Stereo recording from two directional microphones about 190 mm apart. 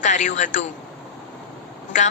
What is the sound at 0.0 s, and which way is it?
Speech, 40° left (ahead or behind).